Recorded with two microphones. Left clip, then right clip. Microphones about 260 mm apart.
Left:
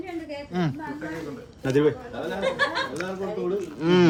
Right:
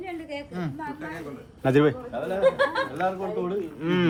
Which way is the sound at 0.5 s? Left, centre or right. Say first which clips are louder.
Left 9 dB; left.